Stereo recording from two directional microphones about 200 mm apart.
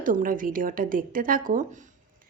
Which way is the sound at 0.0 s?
40° right (ahead or behind).